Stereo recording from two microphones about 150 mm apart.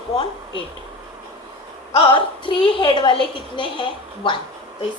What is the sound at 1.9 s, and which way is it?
A woman's voice, 35° left (ahead or behind).